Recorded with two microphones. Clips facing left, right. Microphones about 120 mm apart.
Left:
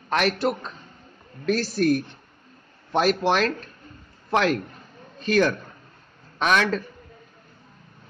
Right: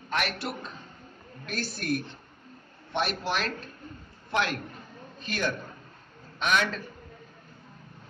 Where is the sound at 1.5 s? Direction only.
35° left (ahead or behind).